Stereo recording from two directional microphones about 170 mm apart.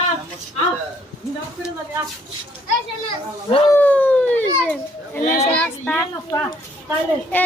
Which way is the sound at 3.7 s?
10° left (ahead or behind).